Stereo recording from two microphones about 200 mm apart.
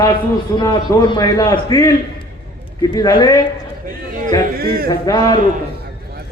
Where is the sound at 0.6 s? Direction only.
25° left (ahead or behind).